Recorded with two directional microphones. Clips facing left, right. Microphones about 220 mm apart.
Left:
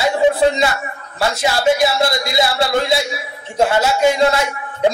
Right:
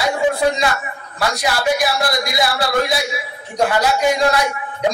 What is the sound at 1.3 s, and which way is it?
Speech, 25° left (ahead or behind).